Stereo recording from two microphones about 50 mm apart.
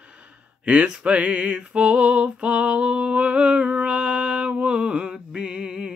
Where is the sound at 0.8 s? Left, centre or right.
Centre.